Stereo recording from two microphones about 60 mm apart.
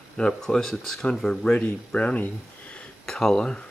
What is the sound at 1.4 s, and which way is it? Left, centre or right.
Speech, centre.